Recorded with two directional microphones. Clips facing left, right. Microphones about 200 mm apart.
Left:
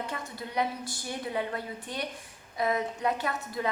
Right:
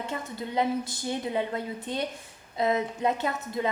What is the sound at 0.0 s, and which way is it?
A woman's voice, 25° right (ahead or behind).